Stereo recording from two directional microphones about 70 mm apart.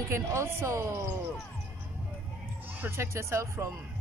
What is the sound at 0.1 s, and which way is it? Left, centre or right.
Speech, right.